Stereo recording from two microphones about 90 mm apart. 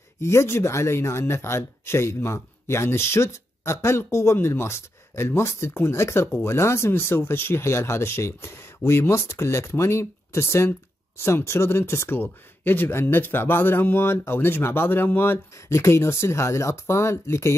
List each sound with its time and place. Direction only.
0.2 s speech: 30° left (ahead or behind)